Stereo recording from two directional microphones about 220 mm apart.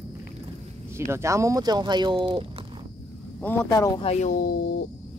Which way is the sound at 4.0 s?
30° left (ahead or behind).